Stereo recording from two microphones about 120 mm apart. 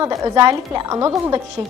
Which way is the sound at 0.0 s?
25° right (ahead or behind).